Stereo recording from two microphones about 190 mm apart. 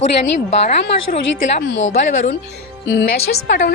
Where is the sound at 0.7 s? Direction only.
45° left (ahead or behind).